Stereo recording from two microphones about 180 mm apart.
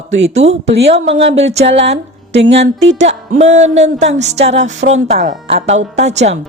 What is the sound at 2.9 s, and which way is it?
Speech, 40° right (ahead or behind).